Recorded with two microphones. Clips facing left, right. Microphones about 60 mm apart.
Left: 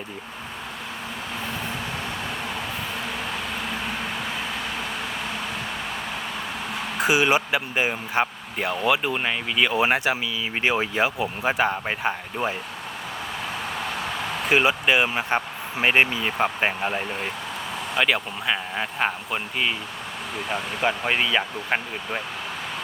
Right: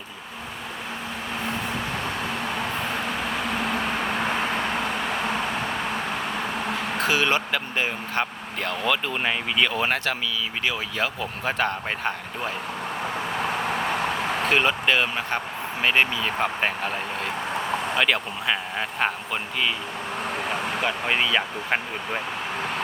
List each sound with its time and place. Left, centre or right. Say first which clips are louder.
4.3 s vehicle: right 5 dB; right
7.0 s speech: left 3 dB; centre
9.1 s speech: even; centre
10.6 s speech: left 6 dB; left; by 12.5 s centre
14.5 s speech: left 3 dB; centre
21.1 s speech: even; centre